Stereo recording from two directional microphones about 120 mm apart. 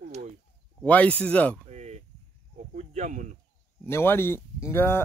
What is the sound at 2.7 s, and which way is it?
Speech, 85° right.